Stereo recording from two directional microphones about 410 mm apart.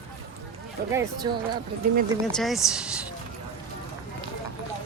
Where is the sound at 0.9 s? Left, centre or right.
Centre.